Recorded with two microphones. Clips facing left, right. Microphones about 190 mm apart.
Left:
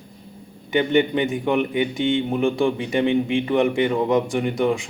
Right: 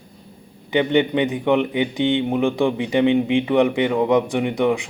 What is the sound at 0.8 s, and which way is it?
A man's voice, 20° right (ahead or behind).